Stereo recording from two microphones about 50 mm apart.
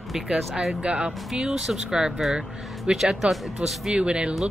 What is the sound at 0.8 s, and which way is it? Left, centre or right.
Speech, centre.